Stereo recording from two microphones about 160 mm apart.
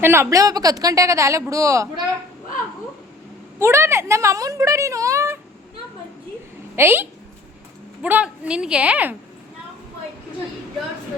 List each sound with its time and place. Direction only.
0.0 s a woman's voice: 15° right (ahead or behind)
3.6 s a woman's voice: 15° right (ahead or behind)
6.7 s a woman's voice: 15° right (ahead or behind)